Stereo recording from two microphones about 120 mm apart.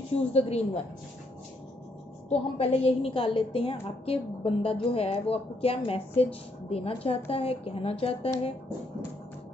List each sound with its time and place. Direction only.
0.2 s a woman's voice: 60° left (ahead or behind)
2.2 s a woman's voice: 55° left (ahead or behind)